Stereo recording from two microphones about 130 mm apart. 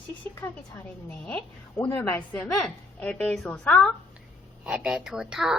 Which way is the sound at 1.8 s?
15° left (ahead or behind).